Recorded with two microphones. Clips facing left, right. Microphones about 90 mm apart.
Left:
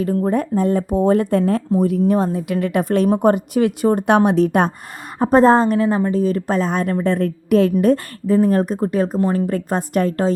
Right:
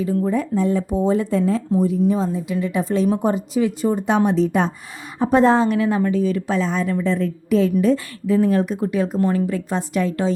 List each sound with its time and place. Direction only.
0.2 s speech: 50° left (ahead or behind)
5.2 s a woman's voice: 40° left (ahead or behind)
8.4 s speech: 40° left (ahead or behind)
9.1 s speech: 25° left (ahead or behind)
9.5 s a woman's voice: 50° left (ahead or behind)